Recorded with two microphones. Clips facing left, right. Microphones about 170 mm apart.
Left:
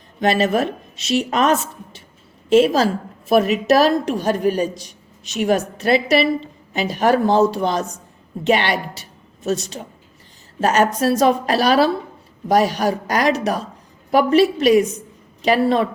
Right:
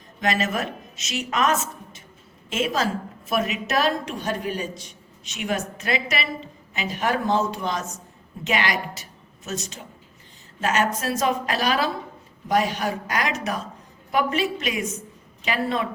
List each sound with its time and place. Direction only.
0.2 s a woman's voice: 30° left (ahead or behind)